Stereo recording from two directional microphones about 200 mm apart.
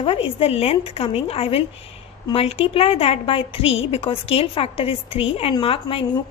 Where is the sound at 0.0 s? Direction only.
25° left (ahead or behind).